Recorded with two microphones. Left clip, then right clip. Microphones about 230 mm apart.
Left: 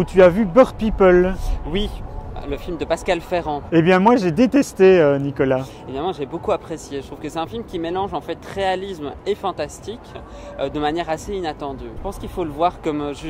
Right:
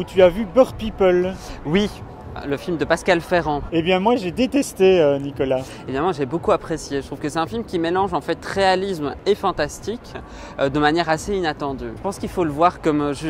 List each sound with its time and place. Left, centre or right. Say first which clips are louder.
0.0 s speech: left 2 dB; left
1.3 s speech: right 4 dB; right
3.7 s speech: left 5 dB; left
5.9 s speech: right 6 dB; right